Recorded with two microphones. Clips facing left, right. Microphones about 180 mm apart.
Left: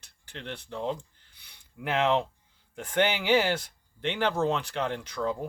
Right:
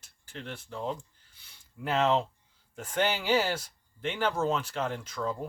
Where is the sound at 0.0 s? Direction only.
65° left (ahead or behind).